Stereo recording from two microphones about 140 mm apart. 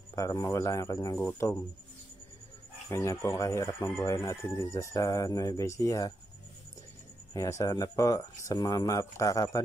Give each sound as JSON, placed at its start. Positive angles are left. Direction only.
{"t": 0.1, "sound": "speech", "side_deg": 20}
{"t": 2.9, "sound": "speech", "side_deg": 20}
{"t": 7.3, "sound": "speech", "side_deg": 20}